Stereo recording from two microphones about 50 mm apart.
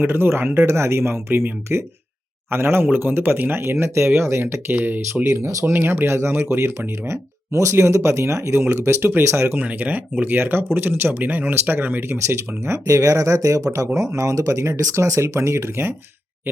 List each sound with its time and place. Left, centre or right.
0.0 s speech: right
1.7 s speech: right
4.7 s speech: right
5.3 s speech: right
5.8 s speech: right
9.0 s speech: right
9.6 s speech: right
12.1 s speech: right